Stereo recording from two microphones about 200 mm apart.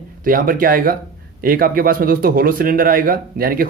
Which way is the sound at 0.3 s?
45° right (ahead or behind).